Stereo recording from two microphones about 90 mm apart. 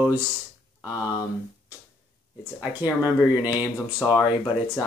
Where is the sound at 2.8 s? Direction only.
20° right (ahead or behind).